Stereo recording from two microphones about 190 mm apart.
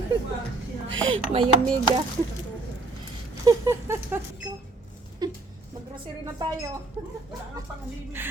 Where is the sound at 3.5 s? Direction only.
15° right (ahead or behind).